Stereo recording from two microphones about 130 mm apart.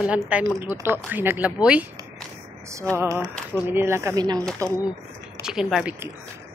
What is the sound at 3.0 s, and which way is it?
Speech, 25° right (ahead or behind).